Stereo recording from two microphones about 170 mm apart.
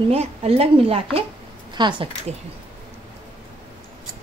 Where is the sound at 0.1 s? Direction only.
35° right (ahead or behind).